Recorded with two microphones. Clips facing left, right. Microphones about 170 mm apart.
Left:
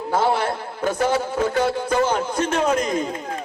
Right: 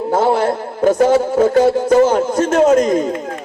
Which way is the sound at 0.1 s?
45° right (ahead or behind).